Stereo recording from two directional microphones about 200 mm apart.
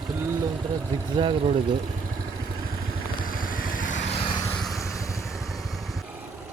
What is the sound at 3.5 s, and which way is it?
Vehicle, 45° left (ahead or behind).